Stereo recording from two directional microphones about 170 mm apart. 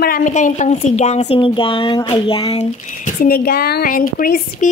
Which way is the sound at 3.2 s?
65° left (ahead or behind).